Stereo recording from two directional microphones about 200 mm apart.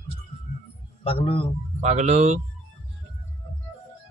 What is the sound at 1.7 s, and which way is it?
Speech, 35° right (ahead or behind).